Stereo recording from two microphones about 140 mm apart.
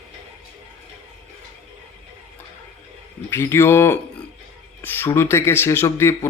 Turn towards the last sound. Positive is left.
turn(degrees=20)  # may be behind; listen again after turning